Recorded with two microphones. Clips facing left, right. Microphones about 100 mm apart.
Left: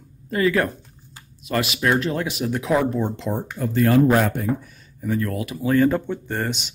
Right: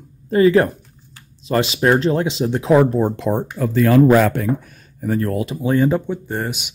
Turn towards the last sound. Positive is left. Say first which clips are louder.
# right 2 dB
turn(degrees=-10)  # may be behind; listen again after turning